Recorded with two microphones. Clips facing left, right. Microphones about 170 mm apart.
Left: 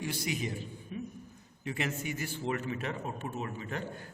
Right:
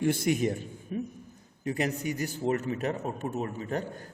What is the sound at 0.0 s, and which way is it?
A man's voice, 50° right (ahead or behind).